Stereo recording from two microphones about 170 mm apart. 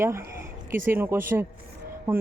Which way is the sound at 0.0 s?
15° right (ahead or behind).